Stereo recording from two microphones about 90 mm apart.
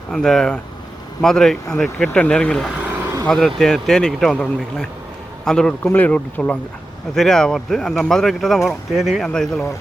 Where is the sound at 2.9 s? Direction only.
25° right (ahead or behind).